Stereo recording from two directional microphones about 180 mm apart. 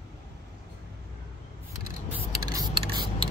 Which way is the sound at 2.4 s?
20° right (ahead or behind).